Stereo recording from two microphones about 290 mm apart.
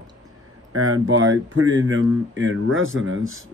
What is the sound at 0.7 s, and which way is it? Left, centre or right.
Speech, right.